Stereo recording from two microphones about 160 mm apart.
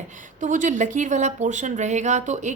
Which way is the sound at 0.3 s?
55° right (ahead or behind).